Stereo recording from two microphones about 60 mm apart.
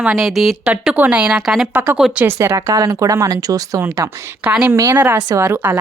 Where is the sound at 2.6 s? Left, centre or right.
Right.